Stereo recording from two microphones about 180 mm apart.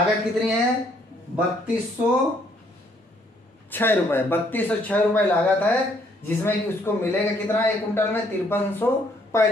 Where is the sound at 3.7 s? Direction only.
10° left (ahead or behind).